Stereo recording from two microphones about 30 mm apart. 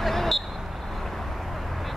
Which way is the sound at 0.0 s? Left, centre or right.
Centre.